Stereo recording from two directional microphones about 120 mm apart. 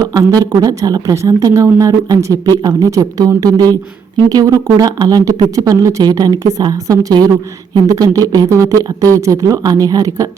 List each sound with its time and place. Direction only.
0.0 s speech: 30° right (ahead or behind)